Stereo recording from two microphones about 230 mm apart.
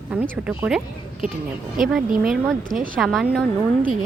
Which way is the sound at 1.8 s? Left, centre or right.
Centre.